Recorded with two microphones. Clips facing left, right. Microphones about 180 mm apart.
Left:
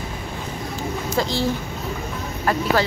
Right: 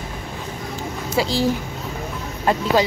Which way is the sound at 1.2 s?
10° right (ahead or behind).